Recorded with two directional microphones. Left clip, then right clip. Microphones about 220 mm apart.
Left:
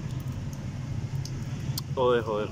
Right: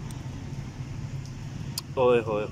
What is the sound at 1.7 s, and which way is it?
Speech, 5° right (ahead or behind).